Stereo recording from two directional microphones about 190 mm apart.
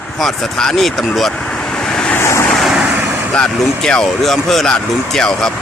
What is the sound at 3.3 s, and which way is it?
Speech, 5° left (ahead or behind).